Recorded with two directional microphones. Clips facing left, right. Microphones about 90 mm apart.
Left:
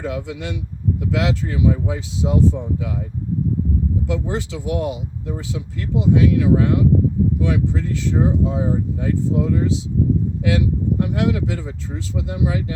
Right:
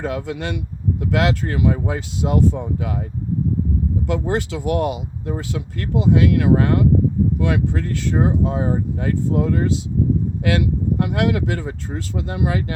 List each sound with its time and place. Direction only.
0.0 s speech: 55° right (ahead or behind)
4.1 s speech: 60° right (ahead or behind)